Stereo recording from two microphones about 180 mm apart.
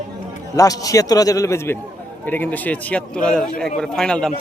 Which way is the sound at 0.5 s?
20° left (ahead or behind).